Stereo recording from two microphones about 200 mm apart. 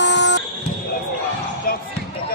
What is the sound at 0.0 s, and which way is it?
Buzzer, 60° left (ahead or behind).